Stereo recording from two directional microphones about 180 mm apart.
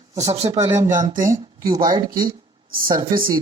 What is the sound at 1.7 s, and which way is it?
Speech, 25° right (ahead or behind).